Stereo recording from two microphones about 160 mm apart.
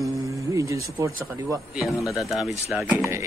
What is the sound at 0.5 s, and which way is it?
Speech, 20° right (ahead or behind).